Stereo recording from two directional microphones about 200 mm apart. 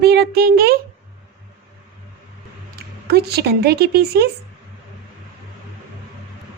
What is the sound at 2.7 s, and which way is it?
Speech, 55° right (ahead or behind).